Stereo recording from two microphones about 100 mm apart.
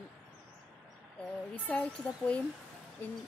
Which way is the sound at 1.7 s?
10° left (ahead or behind).